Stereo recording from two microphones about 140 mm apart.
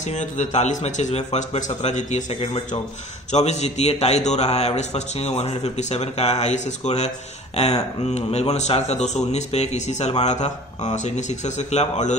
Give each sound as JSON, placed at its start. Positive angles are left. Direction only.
{"t": 0.0, "sound": "a man's voice", "side_deg": 60}